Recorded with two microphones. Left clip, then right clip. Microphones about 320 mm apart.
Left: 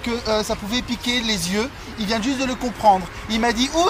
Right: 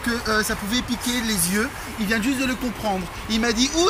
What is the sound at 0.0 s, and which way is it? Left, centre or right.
Speech, centre.